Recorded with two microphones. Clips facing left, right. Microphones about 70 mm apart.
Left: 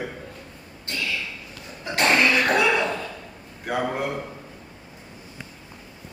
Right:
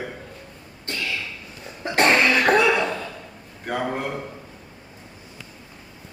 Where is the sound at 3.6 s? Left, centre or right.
Centre.